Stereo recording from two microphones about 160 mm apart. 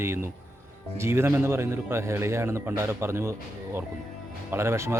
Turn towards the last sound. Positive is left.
turn(degrees=-15)  # may be behind; listen again after turning